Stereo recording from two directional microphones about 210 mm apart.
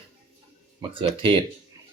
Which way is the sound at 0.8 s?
25° right (ahead or behind).